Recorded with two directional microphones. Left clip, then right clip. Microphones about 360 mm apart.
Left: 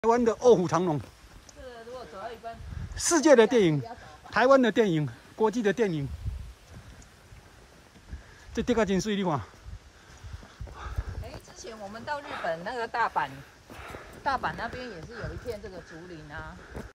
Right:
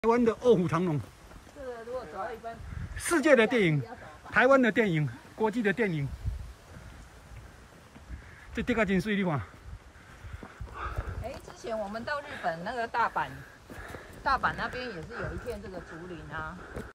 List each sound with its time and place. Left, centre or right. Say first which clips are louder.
0.0 s speech: left 3 dB; centre
3.0 s speech: left 3 dB; centre
8.5 s speech: left 2 dB; centre
10.8 s dog: right 5 dB; centre
11.6 s a woman's voice: right 5 dB; centre